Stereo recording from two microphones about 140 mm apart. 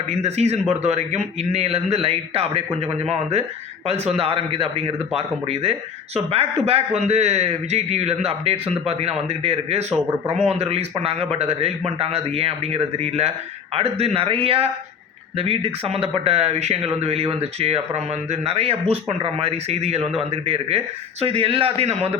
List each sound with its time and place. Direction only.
0.2 s a man's voice: 50° right (ahead or behind)